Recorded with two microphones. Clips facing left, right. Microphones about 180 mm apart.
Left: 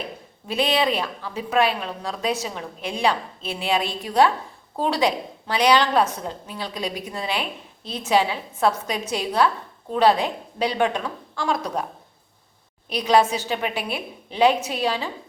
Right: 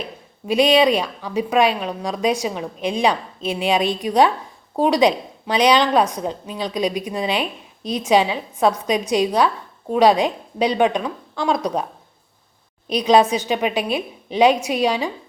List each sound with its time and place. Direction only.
0.4 s a woman's voice: 15° right (ahead or behind)
12.9 s a woman's voice: 20° right (ahead or behind)